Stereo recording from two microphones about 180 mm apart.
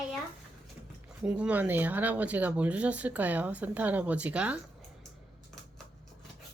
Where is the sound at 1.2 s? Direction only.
5° right (ahead or behind).